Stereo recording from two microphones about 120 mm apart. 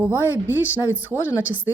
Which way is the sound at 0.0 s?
15° right (ahead or behind).